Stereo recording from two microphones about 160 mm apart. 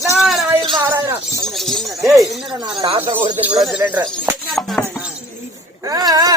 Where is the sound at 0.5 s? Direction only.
30° right (ahead or behind).